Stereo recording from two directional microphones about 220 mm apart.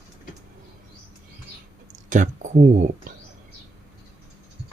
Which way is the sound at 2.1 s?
35° right (ahead or behind).